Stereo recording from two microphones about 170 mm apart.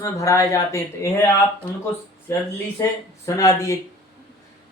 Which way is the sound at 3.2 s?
20° left (ahead or behind).